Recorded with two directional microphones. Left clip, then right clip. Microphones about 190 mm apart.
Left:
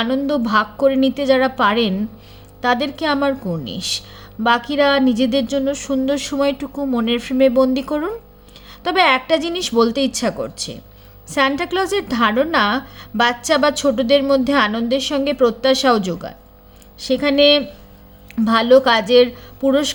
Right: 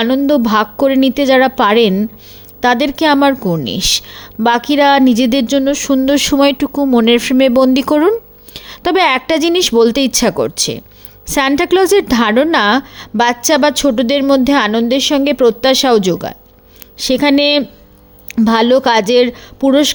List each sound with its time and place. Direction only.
0.0 s speech: 35° right (ahead or behind)